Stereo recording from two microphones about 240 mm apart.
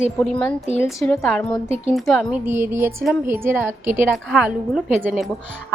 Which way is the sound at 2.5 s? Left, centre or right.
Centre.